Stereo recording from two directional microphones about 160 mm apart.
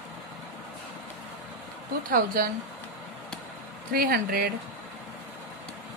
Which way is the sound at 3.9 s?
70° right (ahead or behind).